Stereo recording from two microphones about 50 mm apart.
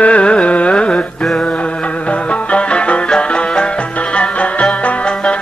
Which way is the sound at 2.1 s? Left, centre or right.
Left.